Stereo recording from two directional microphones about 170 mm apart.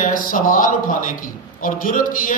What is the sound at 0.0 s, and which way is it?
A man's voice, 55° left (ahead or behind).